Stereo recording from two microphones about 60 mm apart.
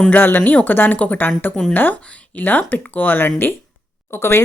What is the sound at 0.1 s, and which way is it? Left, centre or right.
Speech, left.